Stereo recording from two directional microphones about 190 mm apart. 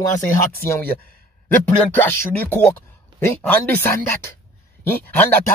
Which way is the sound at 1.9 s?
10° left (ahead or behind).